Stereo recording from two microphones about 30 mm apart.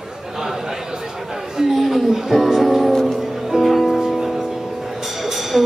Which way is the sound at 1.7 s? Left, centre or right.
Centre.